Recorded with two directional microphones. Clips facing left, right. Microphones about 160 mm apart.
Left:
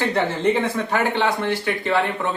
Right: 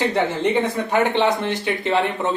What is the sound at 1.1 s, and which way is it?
Speech, 20° right (ahead or behind).